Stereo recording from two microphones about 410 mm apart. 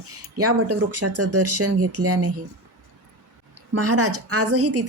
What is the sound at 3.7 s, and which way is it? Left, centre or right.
Speech, right.